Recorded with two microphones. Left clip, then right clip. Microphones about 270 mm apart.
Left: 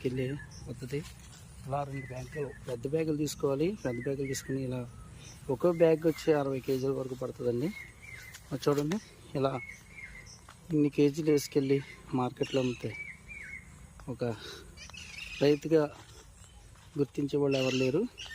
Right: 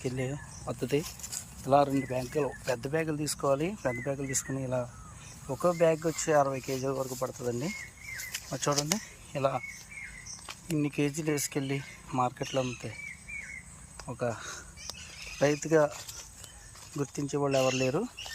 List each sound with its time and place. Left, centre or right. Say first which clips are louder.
0.0 s speech: left 1 dB; centre
0.7 s speech: right 9 dB; right
2.8 s speech: even; centre
10.8 s speech: left 4 dB; centre
14.1 s speech: right 2 dB; centre
17.0 s speech: left 2 dB; centre